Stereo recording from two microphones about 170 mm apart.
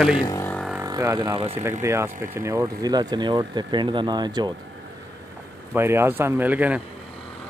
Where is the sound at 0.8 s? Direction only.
20° right (ahead or behind).